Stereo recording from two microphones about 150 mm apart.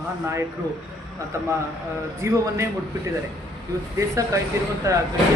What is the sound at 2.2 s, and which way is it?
Speech, 20° right (ahead or behind).